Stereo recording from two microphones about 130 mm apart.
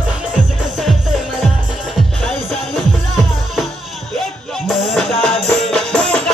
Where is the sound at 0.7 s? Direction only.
Centre (ahead or behind).